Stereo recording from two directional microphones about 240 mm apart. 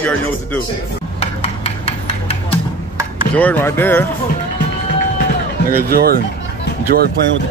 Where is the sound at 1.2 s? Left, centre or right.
Left.